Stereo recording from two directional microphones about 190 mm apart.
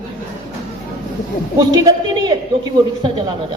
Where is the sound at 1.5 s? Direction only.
20° right (ahead or behind).